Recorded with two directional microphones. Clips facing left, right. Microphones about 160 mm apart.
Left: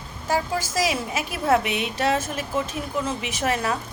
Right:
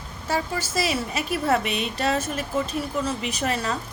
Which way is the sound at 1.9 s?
15° left (ahead or behind).